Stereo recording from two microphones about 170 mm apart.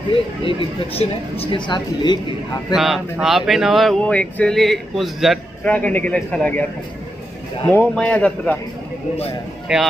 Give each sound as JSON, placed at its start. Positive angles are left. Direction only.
{"t": 0.4, "sound": "speech", "side_deg": 30}
{"t": 2.7, "sound": "speech", "side_deg": 0}
{"t": 7.6, "sound": "a man's voice", "side_deg": 10}
{"t": 9.7, "sound": "speech", "side_deg": -5}